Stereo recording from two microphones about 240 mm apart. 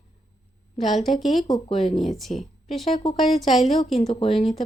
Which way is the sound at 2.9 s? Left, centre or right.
Left.